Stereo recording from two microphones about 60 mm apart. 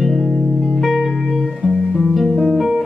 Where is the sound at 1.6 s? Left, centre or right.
Centre.